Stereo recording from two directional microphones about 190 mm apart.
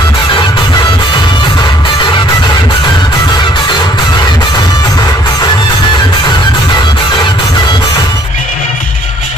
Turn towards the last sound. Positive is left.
turn(degrees=25)  # may be behind; listen again after turning